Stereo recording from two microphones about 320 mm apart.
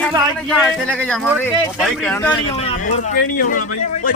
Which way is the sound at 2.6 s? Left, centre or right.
Centre.